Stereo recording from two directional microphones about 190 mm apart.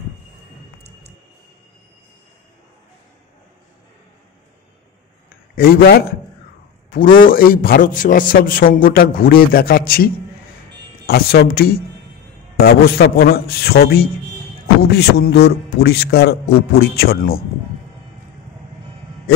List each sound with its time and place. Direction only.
5.6 s a man's voice: 55° left (ahead or behind)